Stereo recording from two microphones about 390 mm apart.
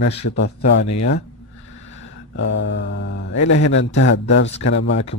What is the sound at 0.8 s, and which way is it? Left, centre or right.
Speech, left.